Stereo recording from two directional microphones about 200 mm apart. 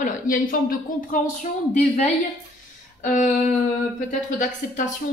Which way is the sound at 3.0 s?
40° left (ahead or behind).